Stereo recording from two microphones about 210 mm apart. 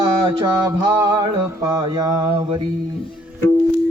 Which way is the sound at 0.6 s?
15° right (ahead or behind).